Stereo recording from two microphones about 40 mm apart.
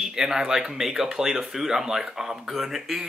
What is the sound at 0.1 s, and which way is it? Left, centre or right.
Speech, centre.